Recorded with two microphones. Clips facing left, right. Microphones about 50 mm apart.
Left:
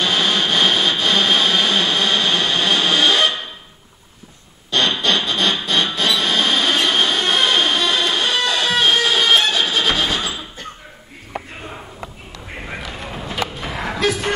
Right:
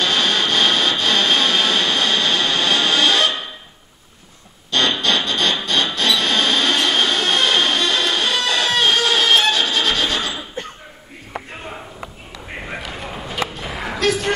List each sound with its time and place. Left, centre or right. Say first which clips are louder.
0.0 s music: even; centre
4.6 s music: even; centre
12.6 s a sound: even; centre